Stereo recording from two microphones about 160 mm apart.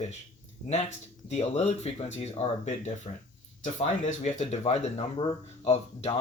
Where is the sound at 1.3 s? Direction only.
40° left (ahead or behind).